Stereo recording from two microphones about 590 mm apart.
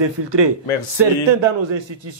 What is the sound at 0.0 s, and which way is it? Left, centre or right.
Speech, right.